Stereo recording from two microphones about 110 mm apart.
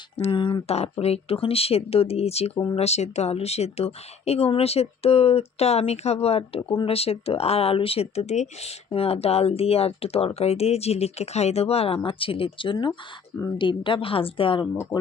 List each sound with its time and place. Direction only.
0.3 s speech: 50° left (ahead or behind)
0.7 s speech: 70° left (ahead or behind)
8.9 s speech: 65° left (ahead or behind)
12.0 s speech: 55° left (ahead or behind)